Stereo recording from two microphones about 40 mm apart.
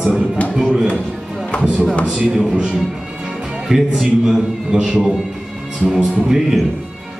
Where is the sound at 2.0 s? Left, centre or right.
Centre.